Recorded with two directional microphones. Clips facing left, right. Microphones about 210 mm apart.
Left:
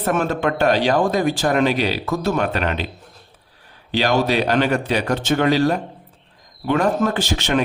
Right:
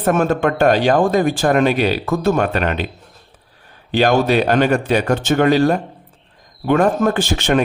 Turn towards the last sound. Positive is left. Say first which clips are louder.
# right 3 dB
turn(degrees=-50)  # may be behind; listen again after turning